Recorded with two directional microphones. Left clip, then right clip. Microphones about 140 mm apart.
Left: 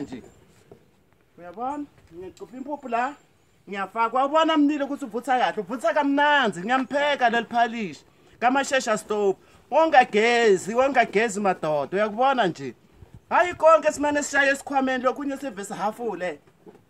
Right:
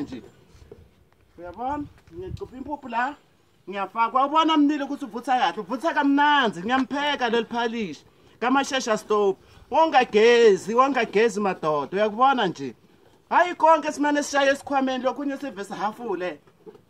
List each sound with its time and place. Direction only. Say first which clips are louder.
2.3 s a man's voice: left 1 dB; 25° left (ahead or behind)